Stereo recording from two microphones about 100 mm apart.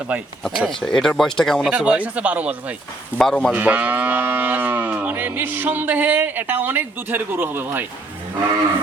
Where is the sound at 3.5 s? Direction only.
15° right (ahead or behind).